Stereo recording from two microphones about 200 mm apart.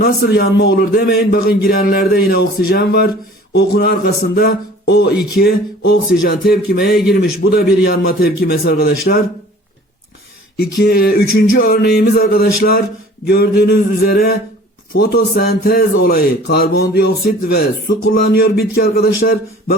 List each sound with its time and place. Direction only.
0.0 s speech: 50° left (ahead or behind)
10.6 s speech: 50° left (ahead or behind)